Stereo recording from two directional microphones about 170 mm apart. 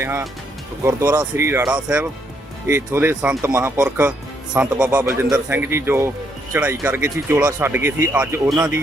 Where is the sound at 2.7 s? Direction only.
15° right (ahead or behind).